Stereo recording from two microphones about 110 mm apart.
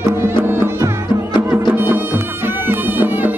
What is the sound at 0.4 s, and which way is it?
Music, 20° right (ahead or behind).